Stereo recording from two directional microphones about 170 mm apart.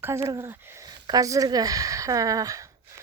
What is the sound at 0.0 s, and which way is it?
Speech, 15° right (ahead or behind).